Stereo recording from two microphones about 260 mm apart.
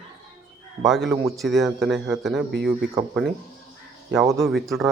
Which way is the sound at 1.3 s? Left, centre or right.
Centre.